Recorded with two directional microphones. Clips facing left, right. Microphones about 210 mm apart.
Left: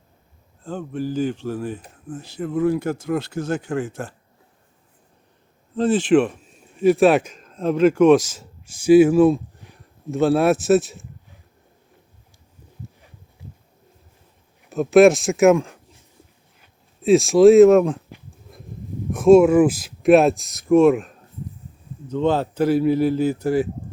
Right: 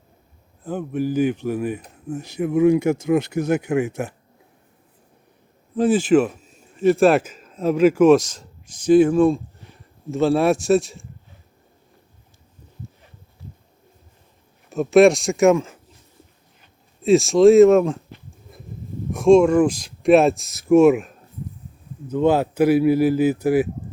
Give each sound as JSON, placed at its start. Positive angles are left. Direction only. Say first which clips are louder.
{"t": 0.8, "sound": "speech", "louder": "right 3 dB", "side_deg": -10}
{"t": 2.0, "sound": "speech", "louder": "right 4 dB", "side_deg": -20}
{"t": 5.7, "sound": "a man's voice", "louder": "right 1 dB", "side_deg": -10}
{"t": 14.7, "sound": "speech", "louder": "left 1 dB", "side_deg": 0}
{"t": 19.1, "sound": "speech", "louder": "left 1 dB", "side_deg": 5}